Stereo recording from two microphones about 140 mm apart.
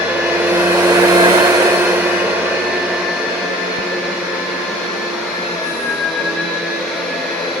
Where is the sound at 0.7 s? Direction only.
20° right (ahead or behind).